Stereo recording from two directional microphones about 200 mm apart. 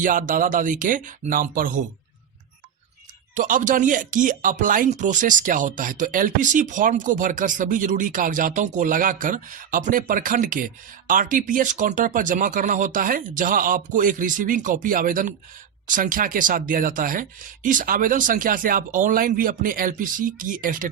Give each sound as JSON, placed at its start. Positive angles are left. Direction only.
{"t": 0.0, "sound": "speech", "side_deg": -40}
{"t": 3.3, "sound": "speech", "side_deg": -40}